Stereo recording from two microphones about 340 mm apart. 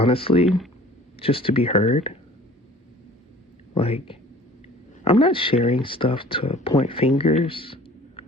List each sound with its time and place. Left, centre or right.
0.0 s speech: centre
3.8 s speech: centre